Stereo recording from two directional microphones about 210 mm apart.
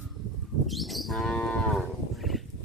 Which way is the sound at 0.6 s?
Centre (ahead or behind).